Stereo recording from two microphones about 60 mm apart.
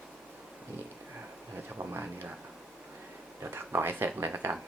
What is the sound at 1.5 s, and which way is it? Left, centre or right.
Speech, right.